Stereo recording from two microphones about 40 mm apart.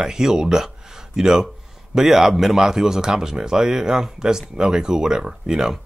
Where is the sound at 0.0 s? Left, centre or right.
Centre.